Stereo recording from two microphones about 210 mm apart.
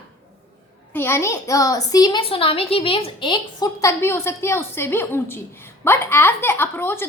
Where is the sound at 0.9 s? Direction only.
10° left (ahead or behind).